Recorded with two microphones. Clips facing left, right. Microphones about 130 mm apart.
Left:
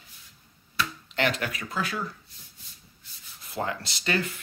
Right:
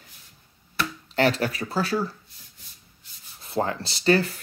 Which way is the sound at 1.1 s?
35° right (ahead or behind).